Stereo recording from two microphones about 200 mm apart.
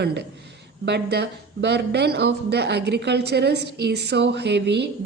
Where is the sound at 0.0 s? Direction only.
55° right (ahead or behind).